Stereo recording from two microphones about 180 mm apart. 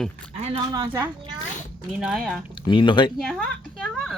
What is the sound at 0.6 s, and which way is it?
Speech, 20° right (ahead or behind).